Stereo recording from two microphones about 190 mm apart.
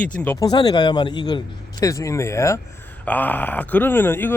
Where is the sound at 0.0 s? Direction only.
5° left (ahead or behind).